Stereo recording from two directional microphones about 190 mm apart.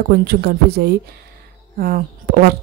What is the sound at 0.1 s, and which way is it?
A woman's voice, 55° right (ahead or behind).